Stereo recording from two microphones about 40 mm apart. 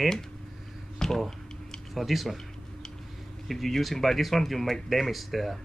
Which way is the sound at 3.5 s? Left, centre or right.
Centre.